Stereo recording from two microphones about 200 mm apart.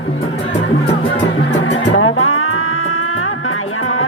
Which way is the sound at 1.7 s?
90° left.